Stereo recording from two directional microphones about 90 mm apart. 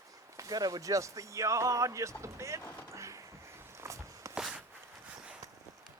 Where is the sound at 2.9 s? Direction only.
35° right (ahead or behind).